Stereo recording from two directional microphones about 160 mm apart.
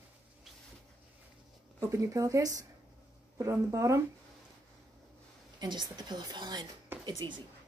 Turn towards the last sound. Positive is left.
turn(degrees=-30)  # may be behind; listen again after turning